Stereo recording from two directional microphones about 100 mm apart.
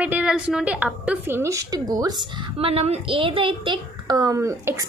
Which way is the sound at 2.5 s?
75° right (ahead or behind).